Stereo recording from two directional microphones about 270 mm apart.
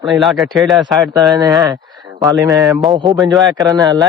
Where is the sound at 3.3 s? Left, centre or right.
Centre.